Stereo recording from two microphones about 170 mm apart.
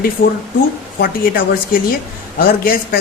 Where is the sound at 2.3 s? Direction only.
60° left (ahead or behind).